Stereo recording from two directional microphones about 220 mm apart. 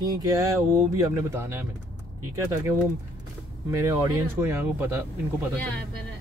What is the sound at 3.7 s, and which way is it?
Speech, 15° right (ahead or behind).